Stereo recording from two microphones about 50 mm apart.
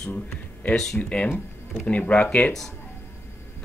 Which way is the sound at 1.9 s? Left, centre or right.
Left.